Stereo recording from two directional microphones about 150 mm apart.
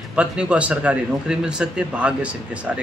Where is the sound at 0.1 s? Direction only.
5° right (ahead or behind).